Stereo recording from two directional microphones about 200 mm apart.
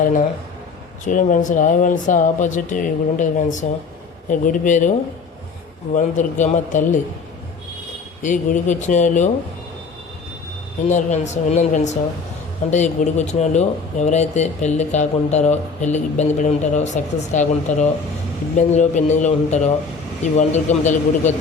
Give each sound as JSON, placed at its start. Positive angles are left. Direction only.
{"t": 1.0, "sound": "speech", "side_deg": 40}
{"t": 8.2, "sound": "speech", "side_deg": 40}
{"t": 10.8, "sound": "speech", "side_deg": 35}